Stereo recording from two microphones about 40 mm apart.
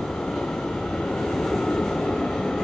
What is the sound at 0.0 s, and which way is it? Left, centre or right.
Vehicle, centre.